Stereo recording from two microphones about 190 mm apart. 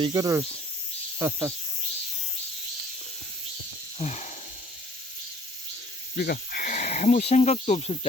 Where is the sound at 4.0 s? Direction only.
35° left (ahead or behind).